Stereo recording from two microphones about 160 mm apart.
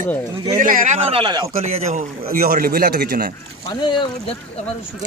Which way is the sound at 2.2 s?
65° right (ahead or behind).